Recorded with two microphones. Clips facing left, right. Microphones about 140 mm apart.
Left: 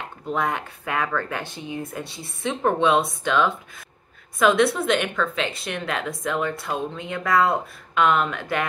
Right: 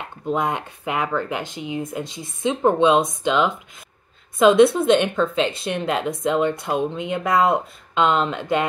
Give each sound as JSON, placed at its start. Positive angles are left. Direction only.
{"t": 0.3, "sound": "a woman's voice", "side_deg": -20}